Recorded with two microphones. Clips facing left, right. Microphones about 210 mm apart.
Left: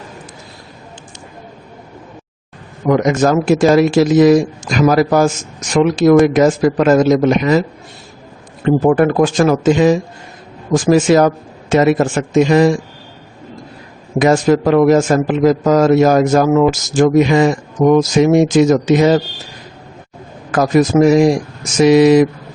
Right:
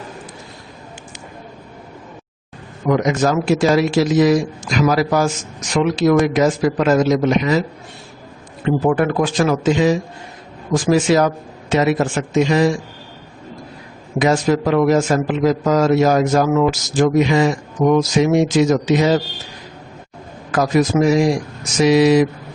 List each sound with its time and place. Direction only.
2.8 s a man's voice: 50° left (ahead or behind)
8.6 s a man's voice: 45° left (ahead or behind)
14.2 s a man's voice: 50° left (ahead or behind)
20.5 s a man's voice: 45° left (ahead or behind)